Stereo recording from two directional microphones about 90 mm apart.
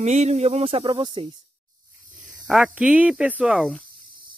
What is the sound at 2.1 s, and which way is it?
Speech, 5° right (ahead or behind).